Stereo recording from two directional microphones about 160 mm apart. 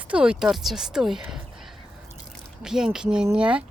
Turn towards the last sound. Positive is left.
turn(degrees=-5)  # may be behind; listen again after turning